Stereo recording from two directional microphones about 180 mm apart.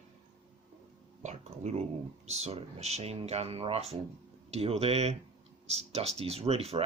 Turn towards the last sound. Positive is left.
turn(degrees=-35)  # may be behind; listen again after turning